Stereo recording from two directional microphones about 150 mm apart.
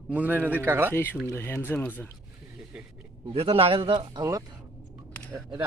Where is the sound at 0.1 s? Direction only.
10° right (ahead or behind).